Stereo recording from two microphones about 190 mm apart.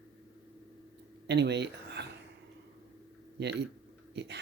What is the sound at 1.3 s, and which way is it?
Speech, 65° right (ahead or behind).